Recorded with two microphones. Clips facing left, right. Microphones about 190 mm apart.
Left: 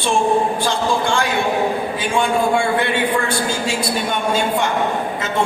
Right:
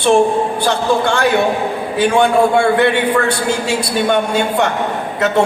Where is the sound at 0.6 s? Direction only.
65° right (ahead or behind).